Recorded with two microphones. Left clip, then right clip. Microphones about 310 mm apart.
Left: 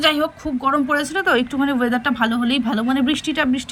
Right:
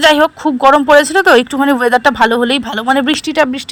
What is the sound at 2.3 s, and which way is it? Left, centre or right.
A woman's voice, centre.